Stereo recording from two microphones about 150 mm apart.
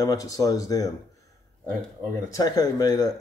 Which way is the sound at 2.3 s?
25° left (ahead or behind).